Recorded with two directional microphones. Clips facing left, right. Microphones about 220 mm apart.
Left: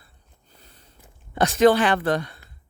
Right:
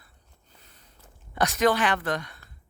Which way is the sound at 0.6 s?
30° left (ahead or behind).